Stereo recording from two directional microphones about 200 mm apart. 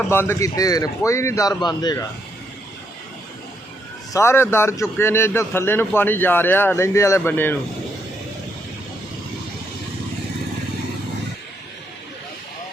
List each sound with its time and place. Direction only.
0.1 s a man's voice: 10° left (ahead or behind)
4.1 s a man's voice: 15° left (ahead or behind)